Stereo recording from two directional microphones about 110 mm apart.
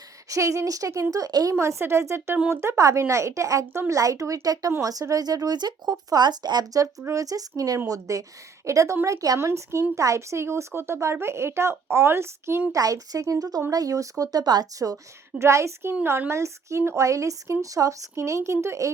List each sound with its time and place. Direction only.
0.3 s speech: 30° right (ahead or behind)